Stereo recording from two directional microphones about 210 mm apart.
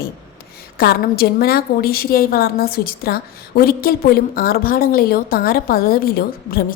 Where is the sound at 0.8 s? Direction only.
45° left (ahead or behind).